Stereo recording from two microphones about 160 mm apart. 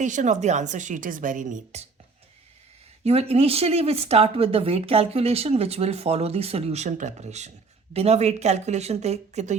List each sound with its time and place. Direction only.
0.0 s a woman's voice: 50° right (ahead or behind)
3.0 s a woman's voice: 40° right (ahead or behind)